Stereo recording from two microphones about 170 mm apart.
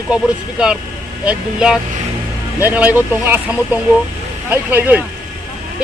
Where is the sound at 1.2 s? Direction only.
5° right (ahead or behind).